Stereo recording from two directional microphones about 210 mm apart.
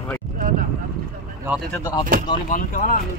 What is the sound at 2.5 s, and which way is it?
Speech, 40° left (ahead or behind).